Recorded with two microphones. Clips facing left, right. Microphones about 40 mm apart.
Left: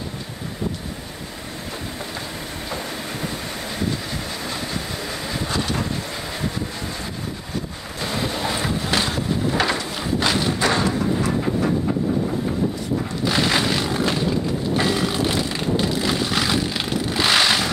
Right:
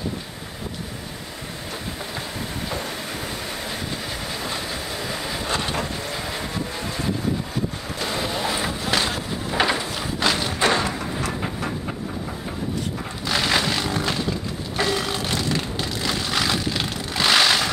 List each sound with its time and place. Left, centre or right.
5.5 s boat: right
8.0 s boat: centre
10.0 s run: centre
10.7 s a sound: centre
13.2 s vehicle: centre